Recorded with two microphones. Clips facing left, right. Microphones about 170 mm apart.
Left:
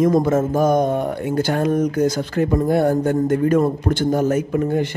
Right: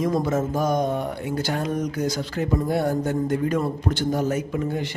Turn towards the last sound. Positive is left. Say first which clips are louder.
# left 7 dB
turn(degrees=50)  # may be behind; listen again after turning